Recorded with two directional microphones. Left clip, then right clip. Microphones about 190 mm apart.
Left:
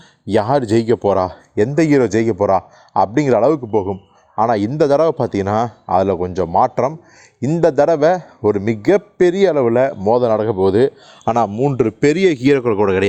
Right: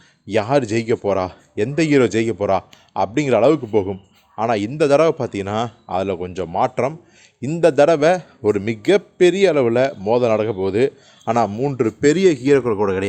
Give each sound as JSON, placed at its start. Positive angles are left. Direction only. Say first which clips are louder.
{"t": 0.3, "sound": "a man's voice", "louder": "left 3 dB", "side_deg": 35}
{"t": 3.7, "sound": "a man's voice", "louder": "left 1 dB", "side_deg": 20}
{"t": 4.4, "sound": "a man's voice", "louder": "left 4 dB", "side_deg": 30}